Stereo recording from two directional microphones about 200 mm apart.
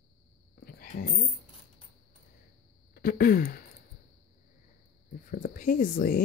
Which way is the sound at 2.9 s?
45° left (ahead or behind).